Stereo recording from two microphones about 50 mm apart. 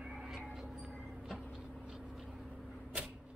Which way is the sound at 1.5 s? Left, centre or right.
Centre.